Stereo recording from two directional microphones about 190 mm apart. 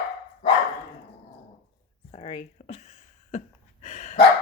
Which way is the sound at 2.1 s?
30° left (ahead or behind).